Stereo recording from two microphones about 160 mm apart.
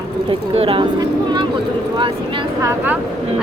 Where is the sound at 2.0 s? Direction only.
30° right (ahead or behind).